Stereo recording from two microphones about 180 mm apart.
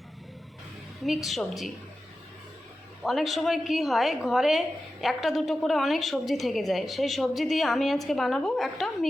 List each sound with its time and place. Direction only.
1.0 s a woman's voice: centre (ahead or behind)
3.0 s a woman's voice: centre (ahead or behind)